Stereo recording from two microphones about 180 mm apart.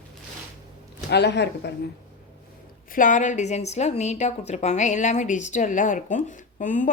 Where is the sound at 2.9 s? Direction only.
45° left (ahead or behind).